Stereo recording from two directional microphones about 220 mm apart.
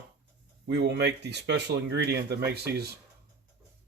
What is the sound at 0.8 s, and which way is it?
Speech, 50° right (ahead or behind).